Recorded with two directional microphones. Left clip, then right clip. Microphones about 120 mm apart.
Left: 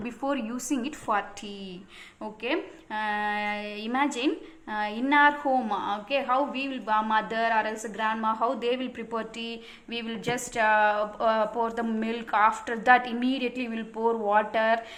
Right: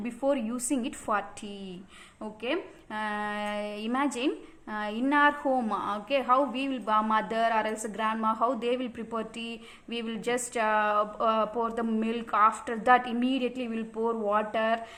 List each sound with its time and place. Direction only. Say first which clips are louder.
0.0 s a woman's voice: right 2 dB; 35° right (ahead or behind)